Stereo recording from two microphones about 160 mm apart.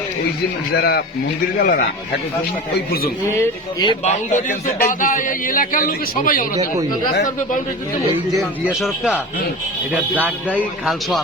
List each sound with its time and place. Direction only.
0.7 s speech: 85° left
1.5 s a man's voice: 60° left (ahead or behind)
3.3 s speech: 25° left (ahead or behind)
4.0 s a man's voice: 50° left (ahead or behind)
8.4 s a man's voice: centre (ahead or behind)